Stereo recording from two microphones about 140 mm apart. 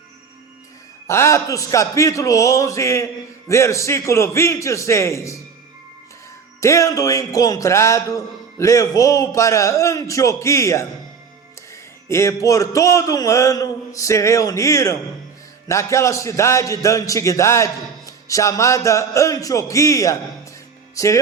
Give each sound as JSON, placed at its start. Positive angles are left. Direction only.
{"t": 1.0, "sound": "a man's voice", "side_deg": 20}
{"t": 6.6, "sound": "a man's voice", "side_deg": 20}
{"t": 12.0, "sound": "a man's voice", "side_deg": 20}